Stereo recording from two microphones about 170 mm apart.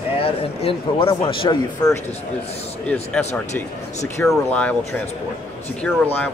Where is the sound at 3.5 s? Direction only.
15° left (ahead or behind).